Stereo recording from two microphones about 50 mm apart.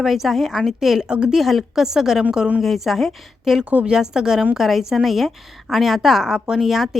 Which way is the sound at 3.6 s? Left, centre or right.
Right.